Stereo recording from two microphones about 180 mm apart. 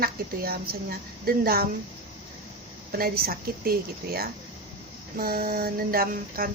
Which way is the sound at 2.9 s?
55° right (ahead or behind).